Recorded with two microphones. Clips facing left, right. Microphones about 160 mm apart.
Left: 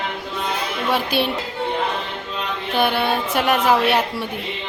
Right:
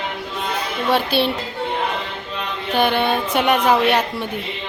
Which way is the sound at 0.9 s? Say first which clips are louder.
Right 3 dB; 10° left (ahead or behind).